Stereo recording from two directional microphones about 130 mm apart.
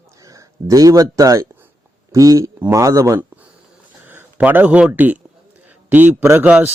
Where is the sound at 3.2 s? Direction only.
10° right (ahead or behind).